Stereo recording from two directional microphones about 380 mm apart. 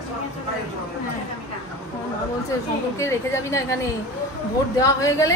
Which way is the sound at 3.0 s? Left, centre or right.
Centre.